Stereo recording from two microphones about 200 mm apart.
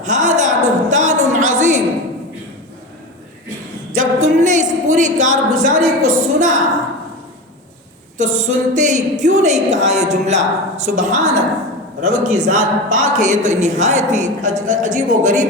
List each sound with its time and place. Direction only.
0.0 s a sound: 40° right (ahead or behind)
3.9 s a woman's voice: 35° right (ahead or behind)
8.2 s a woman's voice: 35° right (ahead or behind)